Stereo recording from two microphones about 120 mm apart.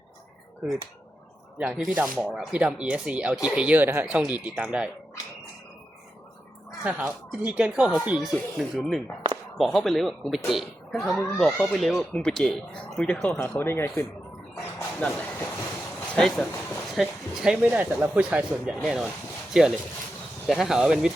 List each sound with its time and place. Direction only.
1.5 s speech: 5° right (ahead or behind)
6.8 s speech: 10° right (ahead or behind); by 14.0 s 20° left (ahead or behind)
14.6 s train: 15° left (ahead or behind)
16.1 s speech: 5° left (ahead or behind)